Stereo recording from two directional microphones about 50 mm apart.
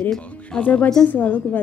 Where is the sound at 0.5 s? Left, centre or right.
Centre.